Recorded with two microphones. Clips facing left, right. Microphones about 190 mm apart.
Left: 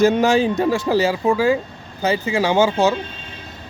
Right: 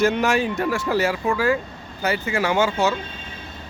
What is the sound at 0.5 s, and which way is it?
Speech, 15° left (ahead or behind).